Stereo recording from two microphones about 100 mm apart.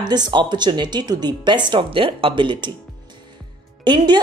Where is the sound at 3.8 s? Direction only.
50° right (ahead or behind).